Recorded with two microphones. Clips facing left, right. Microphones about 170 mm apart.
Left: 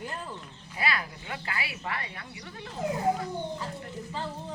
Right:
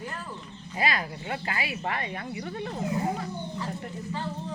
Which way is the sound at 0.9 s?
35° right (ahead or behind).